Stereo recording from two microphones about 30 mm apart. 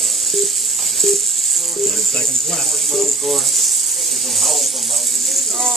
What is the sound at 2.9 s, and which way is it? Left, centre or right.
Speech, centre.